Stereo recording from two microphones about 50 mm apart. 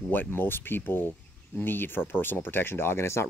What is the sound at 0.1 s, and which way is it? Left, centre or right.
Speech, left.